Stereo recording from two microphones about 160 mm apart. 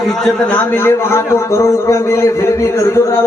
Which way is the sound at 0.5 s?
15° left (ahead or behind).